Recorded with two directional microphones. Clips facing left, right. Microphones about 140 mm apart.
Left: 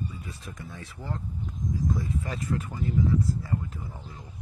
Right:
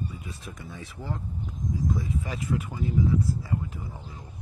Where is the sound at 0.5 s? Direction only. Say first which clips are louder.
Even; 5° right (ahead or behind).